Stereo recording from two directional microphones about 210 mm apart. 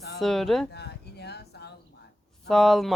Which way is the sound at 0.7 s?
50° left (ahead or behind).